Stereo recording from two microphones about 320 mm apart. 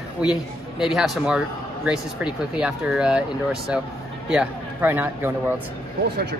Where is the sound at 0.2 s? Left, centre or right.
Centre.